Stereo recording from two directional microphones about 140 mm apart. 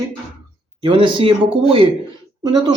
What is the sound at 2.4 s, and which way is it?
Speech, 25° right (ahead or behind).